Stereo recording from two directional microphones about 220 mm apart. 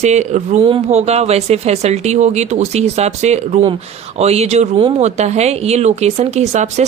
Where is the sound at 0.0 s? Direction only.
30° right (ahead or behind).